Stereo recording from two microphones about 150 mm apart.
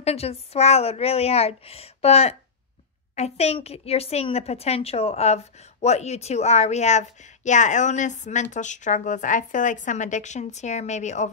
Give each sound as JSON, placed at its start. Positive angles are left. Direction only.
{"t": 0.0, "sound": "a woman's voice", "side_deg": 40}